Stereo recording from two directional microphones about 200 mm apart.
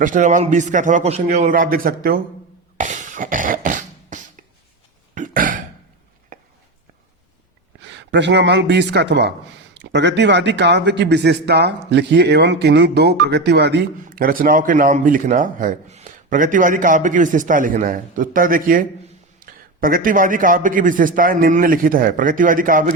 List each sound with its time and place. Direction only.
0.0 s a man's voice: 40° right (ahead or behind)
2.7 s beatboxing: 40° right (ahead or behind)
5.1 s throat clearing: 40° right (ahead or behind)
6.3 s a sound: 40° right (ahead or behind)
7.9 s speech: 60° right (ahead or behind)
14.1 s a man's voice: 45° right (ahead or behind)